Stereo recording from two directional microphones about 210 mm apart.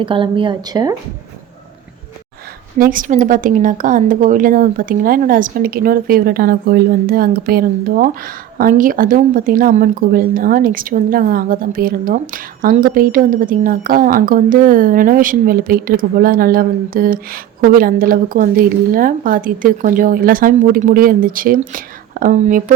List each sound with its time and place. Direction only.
0.0 s speech: 25° right (ahead or behind)
2.7 s a woman's voice: 40° right (ahead or behind)